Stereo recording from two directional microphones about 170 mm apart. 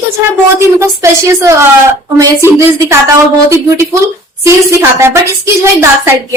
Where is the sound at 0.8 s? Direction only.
15° right (ahead or behind).